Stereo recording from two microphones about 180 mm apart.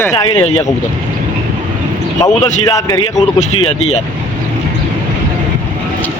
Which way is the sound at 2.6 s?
20° left (ahead or behind).